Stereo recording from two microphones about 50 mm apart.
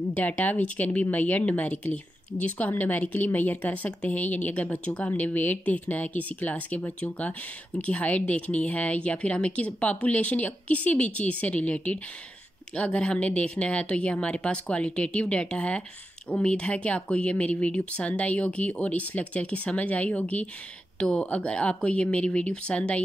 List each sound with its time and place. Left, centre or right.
0.1 s speech: left